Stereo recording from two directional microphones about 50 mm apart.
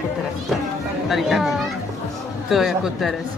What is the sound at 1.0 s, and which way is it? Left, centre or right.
A woman's voice, centre.